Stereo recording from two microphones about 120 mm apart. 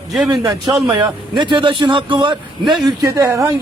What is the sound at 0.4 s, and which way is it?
Speech, 35° right (ahead or behind).